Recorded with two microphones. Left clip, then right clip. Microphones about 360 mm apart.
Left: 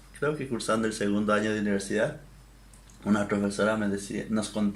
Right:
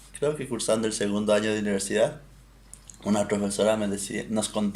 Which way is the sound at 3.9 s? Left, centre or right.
Right.